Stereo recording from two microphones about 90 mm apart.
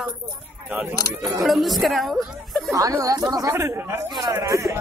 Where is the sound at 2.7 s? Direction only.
40° right (ahead or behind).